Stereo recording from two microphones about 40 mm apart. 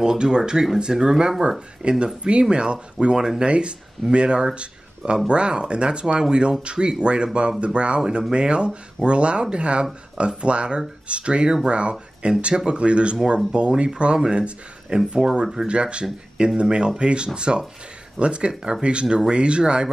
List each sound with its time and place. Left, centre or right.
0.0 s speech: centre